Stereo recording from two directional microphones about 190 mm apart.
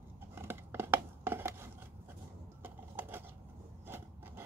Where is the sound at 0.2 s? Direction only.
10° right (ahead or behind).